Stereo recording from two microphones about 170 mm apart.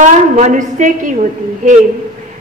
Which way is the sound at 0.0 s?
45° right (ahead or behind).